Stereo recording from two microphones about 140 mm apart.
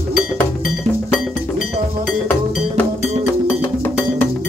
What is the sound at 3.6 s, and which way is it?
Cowbell, 15° left (ahead or behind).